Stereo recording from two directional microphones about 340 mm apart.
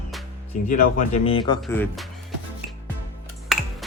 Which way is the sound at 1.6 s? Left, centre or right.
Centre.